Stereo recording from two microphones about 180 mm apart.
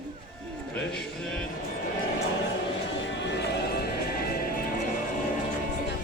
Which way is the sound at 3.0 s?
75° left (ahead or behind).